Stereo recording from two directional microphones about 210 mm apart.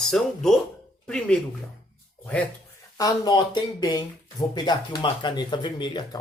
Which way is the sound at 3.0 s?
20° left (ahead or behind).